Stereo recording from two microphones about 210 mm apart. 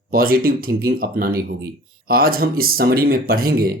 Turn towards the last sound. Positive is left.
turn(degrees=-45)  # may be behind; listen again after turning